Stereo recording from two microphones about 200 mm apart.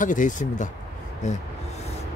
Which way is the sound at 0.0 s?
40° left (ahead or behind).